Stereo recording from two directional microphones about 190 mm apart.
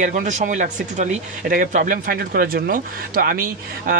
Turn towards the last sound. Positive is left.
turn(degrees=-50)  # may be behind; listen again after turning